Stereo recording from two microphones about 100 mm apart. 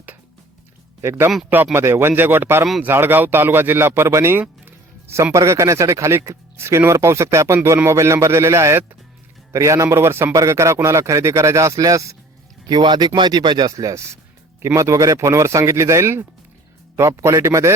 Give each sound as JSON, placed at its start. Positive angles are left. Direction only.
{"t": 1.0, "sound": "speech", "side_deg": -25}
{"t": 12.6, "sound": "speech", "side_deg": -45}